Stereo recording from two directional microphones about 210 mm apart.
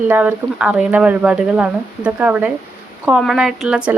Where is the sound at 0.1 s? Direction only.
10° right (ahead or behind).